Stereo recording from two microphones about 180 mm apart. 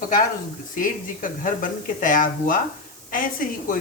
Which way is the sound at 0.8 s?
50° left (ahead or behind).